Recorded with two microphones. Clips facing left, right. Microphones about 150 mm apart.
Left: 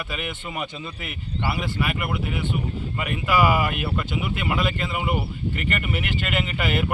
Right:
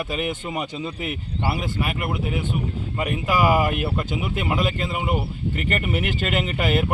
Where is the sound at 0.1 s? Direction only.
40° right (ahead or behind).